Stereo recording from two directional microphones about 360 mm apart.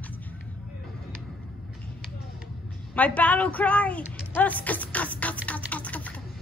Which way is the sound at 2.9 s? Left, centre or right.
Centre.